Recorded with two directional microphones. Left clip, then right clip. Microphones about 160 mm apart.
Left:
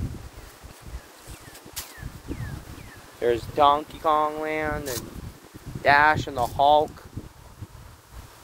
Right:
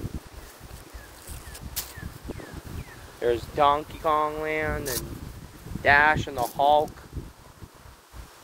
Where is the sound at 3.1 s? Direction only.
60° left (ahead or behind).